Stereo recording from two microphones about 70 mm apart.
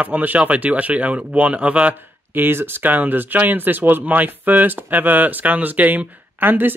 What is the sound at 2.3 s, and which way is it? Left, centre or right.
Speech, right.